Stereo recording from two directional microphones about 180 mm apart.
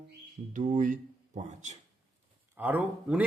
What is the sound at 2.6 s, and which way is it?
Speech, 10° right (ahead or behind).